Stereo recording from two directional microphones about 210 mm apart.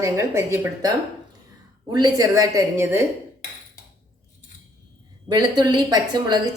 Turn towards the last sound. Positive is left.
turn(degrees=-20)  # may be behind; listen again after turning